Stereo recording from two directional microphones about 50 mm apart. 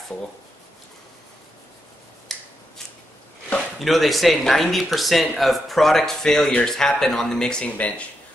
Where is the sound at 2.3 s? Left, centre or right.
Centre.